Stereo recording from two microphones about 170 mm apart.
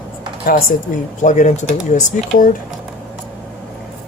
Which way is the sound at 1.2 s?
45° left (ahead or behind).